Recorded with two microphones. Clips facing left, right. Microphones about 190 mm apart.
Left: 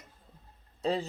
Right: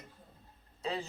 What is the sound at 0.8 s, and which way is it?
Speech, 35° left (ahead or behind).